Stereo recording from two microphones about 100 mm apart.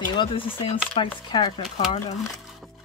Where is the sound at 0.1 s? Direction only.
55° left (ahead or behind).